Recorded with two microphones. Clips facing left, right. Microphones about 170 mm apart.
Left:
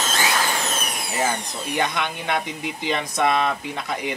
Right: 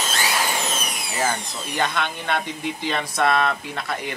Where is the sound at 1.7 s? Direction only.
15° left (ahead or behind).